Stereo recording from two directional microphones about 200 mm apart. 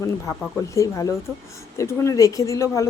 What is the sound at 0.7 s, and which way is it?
Speech, 15° left (ahead or behind).